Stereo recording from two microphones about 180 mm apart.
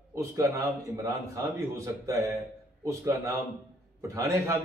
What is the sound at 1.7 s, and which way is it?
A man's voice, 15° right (ahead or behind).